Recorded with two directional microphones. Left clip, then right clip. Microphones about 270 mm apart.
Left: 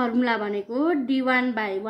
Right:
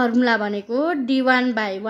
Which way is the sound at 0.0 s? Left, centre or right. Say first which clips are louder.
Right 5 dB; right.